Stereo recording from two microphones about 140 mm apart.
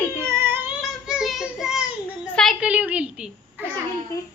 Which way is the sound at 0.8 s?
5° right (ahead or behind).